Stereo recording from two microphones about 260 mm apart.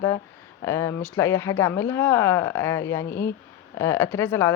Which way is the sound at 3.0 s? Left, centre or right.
Left.